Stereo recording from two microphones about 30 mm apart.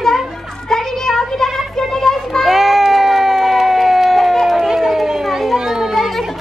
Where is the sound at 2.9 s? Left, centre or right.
Centre.